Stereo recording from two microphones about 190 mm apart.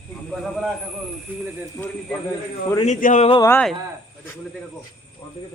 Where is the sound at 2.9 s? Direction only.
40° left (ahead or behind).